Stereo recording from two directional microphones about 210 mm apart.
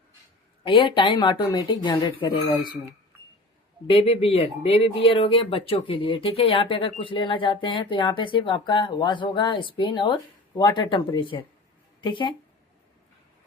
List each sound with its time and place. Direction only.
0.6 s speech: 25° left (ahead or behind)
3.8 s speech: 25° left (ahead or behind)